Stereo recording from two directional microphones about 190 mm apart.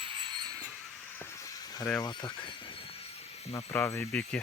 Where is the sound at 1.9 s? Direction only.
25° left (ahead or behind).